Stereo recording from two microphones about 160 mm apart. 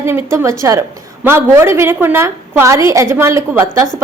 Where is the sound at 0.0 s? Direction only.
15° right (ahead or behind).